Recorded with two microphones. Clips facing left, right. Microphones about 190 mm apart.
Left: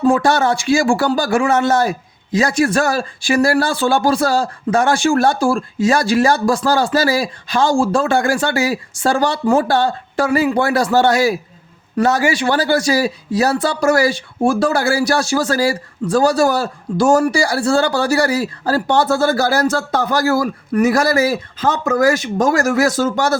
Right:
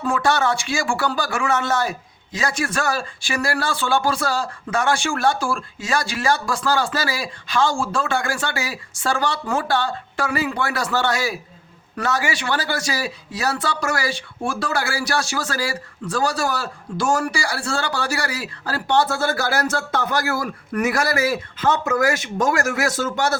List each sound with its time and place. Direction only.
0.0 s speech: 35° left (ahead or behind)